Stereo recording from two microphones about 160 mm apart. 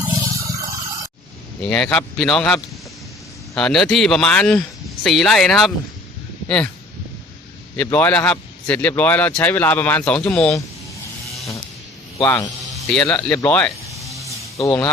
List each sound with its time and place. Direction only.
0.1 s a sound: 20° right (ahead or behind)
1.7 s a man's voice: 5° left (ahead or behind)
7.8 s speech: 10° left (ahead or behind)
12.2 s speech: 15° left (ahead or behind)
12.7 s speech: 5° left (ahead or behind); by 14.8 s 20° left (ahead or behind)